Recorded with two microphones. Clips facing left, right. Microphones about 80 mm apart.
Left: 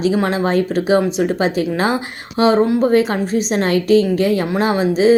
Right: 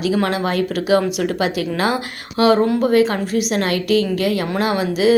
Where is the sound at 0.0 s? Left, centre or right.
Left.